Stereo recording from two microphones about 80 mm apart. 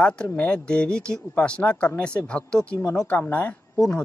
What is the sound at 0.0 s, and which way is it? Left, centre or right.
Speech, centre.